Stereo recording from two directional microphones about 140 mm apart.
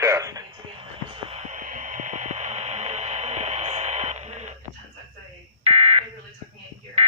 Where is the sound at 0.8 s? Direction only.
45° right (ahead or behind).